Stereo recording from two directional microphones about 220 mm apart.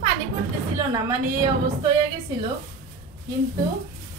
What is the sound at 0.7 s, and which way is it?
A woman's voice, 15° right (ahead or behind).